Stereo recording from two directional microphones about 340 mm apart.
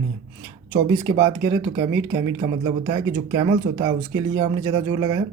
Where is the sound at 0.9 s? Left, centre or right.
Centre.